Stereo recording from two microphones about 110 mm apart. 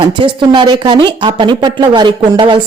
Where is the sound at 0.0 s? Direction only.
50° right (ahead or behind).